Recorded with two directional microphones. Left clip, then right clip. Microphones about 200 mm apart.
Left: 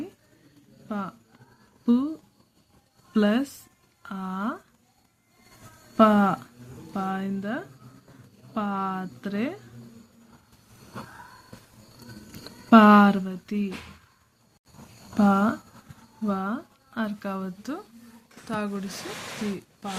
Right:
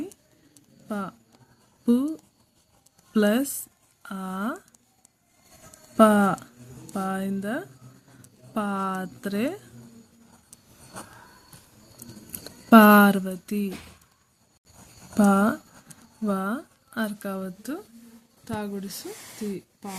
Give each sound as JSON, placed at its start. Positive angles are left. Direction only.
{"t": 0.9, "sound": "speech", "side_deg": -35}
{"t": 4.0, "sound": "a sound", "side_deg": -30}
{"t": 6.0, "sound": "speech", "side_deg": -35}
{"t": 12.7, "sound": "speech", "side_deg": -35}
{"t": 15.1, "sound": "speech", "side_deg": -35}